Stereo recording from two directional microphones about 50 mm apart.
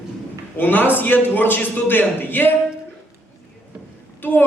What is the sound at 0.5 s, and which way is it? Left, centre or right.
A man's voice, left.